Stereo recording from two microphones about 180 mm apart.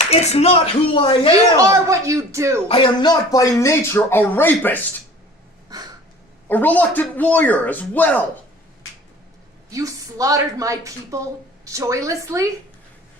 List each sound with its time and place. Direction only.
0.0 s speech: 35° left (ahead or behind)
1.6 s a woman's voice: 15° right (ahead or behind)
2.6 s speech: 30° left (ahead or behind); by 4.8 s 10° left (ahead or behind)
5.6 s a sound: 20° right (ahead or behind)
6.5 s speech: 10° left (ahead or behind)
9.6 s a woman's voice: 20° right (ahead or behind)